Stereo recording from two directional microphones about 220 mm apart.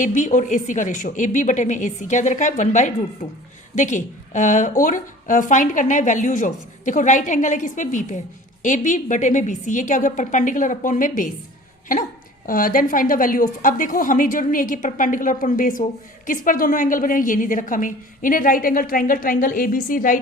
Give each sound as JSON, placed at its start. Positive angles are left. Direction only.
{"t": 0.0, "sound": "a woman's voice", "side_deg": 35}
{"t": 12.5, "sound": "a woman's voice", "side_deg": 40}